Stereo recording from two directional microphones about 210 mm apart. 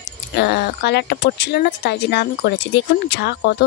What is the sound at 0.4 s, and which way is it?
Speech, 50° left (ahead or behind).